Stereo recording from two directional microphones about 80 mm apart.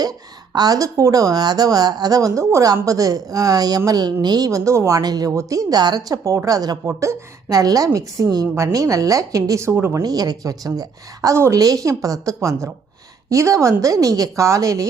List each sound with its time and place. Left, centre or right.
0.0 s speech: right
6.8 s a woman's voice: right
7.6 s speech: right
10.0 s speech: right